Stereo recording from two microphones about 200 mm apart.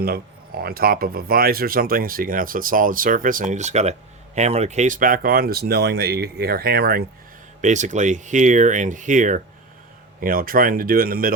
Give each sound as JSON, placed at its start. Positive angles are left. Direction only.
{"t": 0.0, "sound": "speech", "side_deg": -50}
{"t": 7.6, "sound": "speech", "side_deg": -35}